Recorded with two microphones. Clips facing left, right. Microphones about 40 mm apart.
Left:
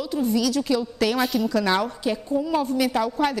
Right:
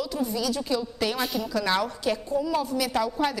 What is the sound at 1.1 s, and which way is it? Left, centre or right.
Speech, centre.